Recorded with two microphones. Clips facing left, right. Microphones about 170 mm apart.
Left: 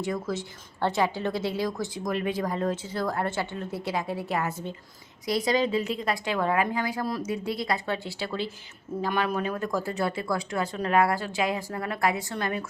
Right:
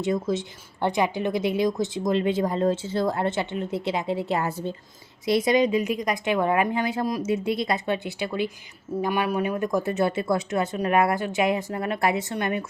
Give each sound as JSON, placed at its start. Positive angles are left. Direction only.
{"t": 0.0, "sound": "a woman's voice", "side_deg": -20}